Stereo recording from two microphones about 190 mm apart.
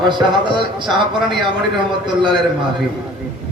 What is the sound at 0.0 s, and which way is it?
A man's voice, 25° right (ahead or behind).